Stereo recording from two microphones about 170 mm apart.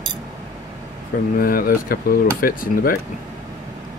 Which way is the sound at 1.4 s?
60° left (ahead or behind).